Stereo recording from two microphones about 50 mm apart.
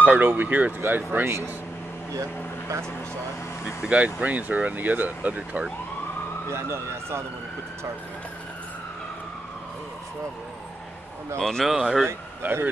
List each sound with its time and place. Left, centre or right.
0.0 s speech: right
3.9 s speech: right
6.5 s speech: right
11.3 s speech: centre
11.6 s speech: centre
12.4 s speech: right